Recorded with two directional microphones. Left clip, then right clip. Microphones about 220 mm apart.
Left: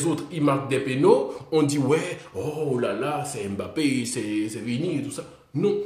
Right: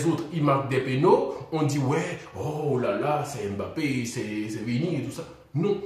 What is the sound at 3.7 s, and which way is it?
Speech, 45° left (ahead or behind).